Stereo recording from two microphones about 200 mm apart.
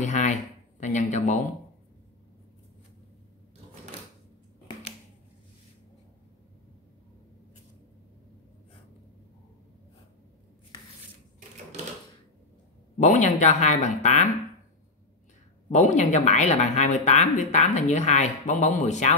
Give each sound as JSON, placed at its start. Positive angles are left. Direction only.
{"t": 0.0, "sound": "a sound", "side_deg": 35}
{"t": 13.0, "sound": "speech", "side_deg": 40}
{"t": 15.7, "sound": "speech", "side_deg": 35}